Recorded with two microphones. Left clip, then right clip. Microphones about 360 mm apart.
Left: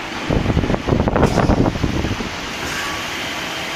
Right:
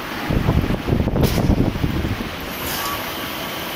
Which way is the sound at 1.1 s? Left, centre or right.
Left.